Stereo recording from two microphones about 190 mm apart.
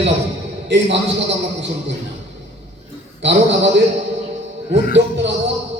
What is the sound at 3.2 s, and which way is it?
Speech, 65° right (ahead or behind).